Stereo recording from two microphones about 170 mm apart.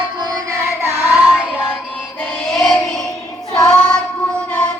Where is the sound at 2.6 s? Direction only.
Centre (ahead or behind).